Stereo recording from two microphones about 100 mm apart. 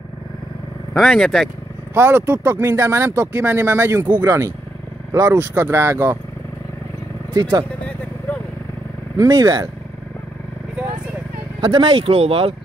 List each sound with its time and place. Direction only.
0.9 s speech: 5° left (ahead or behind)
2.0 s speech: 20° right (ahead or behind)
8.3 s vehicle: 10° left (ahead or behind)
9.2 s speech: 40° right (ahead or behind)
11.6 s speech: 55° right (ahead or behind); by 12.5 s 75° right (ahead or behind)